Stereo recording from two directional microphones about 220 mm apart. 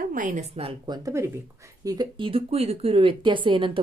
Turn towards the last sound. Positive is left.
turn(degrees=-20)  # may be behind; listen again after turning